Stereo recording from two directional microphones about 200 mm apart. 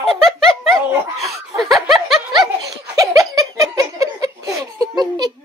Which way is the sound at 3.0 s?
20° right (ahead or behind).